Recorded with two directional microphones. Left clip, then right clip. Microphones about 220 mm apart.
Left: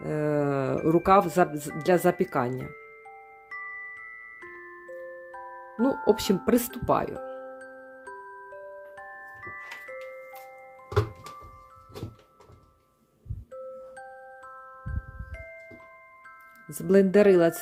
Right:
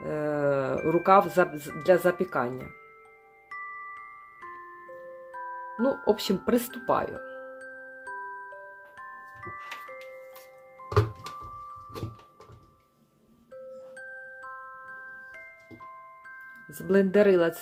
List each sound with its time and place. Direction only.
0.0 s music: 40° left (ahead or behind)
0.9 s speech: 35° left (ahead or behind)
6.1 s speech: 35° left (ahead or behind)
7.6 s glockenspiel: centre (ahead or behind)
9.0 s music: centre (ahead or behind)
16.6 s speech: 40° left (ahead or behind)